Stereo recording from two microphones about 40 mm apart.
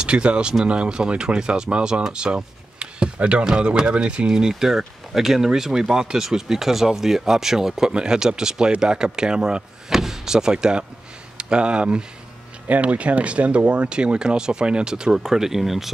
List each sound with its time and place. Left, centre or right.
0.0 s speech: right
7.9 s speech: right
9.9 s speech: centre